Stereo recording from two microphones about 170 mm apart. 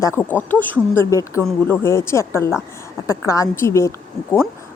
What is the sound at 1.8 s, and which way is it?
Speech, 15° left (ahead or behind).